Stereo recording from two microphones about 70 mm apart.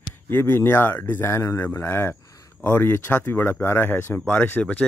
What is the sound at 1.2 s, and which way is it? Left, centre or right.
Speech, left.